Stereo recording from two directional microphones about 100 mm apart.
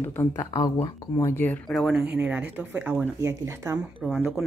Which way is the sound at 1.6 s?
Centre (ahead or behind).